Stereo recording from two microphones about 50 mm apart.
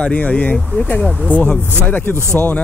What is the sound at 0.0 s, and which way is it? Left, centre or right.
Speech, left.